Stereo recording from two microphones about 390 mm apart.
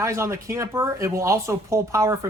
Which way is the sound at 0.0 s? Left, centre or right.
Centre.